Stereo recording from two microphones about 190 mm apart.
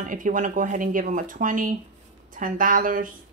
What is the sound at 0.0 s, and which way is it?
Speech, 45° right (ahead or behind).